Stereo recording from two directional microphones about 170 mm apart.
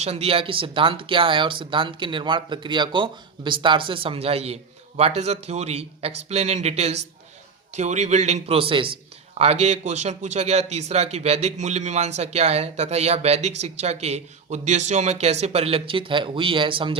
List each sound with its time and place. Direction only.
0.0 s speech: 35° right (ahead or behind)